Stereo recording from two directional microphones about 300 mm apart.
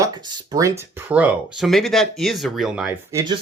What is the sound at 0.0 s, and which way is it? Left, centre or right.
Speech, centre.